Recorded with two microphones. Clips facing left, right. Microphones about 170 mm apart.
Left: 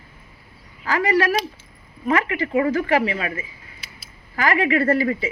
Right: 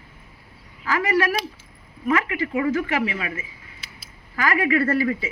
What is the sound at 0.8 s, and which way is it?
A woman's voice, 30° left (ahead or behind).